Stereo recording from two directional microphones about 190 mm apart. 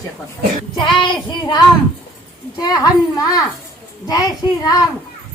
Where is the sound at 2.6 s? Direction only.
20° left (ahead or behind).